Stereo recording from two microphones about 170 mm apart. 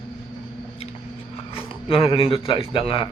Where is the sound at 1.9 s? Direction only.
30° left (ahead or behind).